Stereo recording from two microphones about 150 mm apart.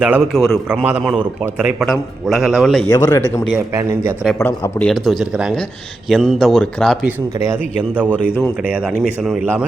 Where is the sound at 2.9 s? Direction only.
25° left (ahead or behind).